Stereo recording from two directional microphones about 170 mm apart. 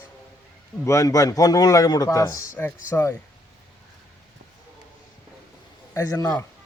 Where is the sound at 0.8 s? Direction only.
15° left (ahead or behind).